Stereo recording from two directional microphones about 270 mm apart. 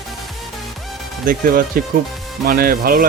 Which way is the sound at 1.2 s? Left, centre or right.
Right.